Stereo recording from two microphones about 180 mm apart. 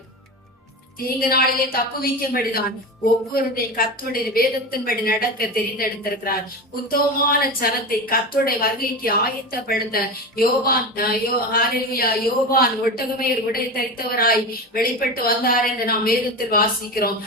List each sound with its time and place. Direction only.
1.3 s a woman's voice: 55° left (ahead or behind)